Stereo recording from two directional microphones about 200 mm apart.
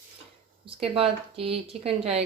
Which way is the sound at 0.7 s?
30° right (ahead or behind).